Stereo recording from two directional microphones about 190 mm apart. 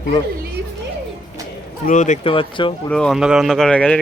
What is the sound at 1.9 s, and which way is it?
Speech, 40° left (ahead or behind).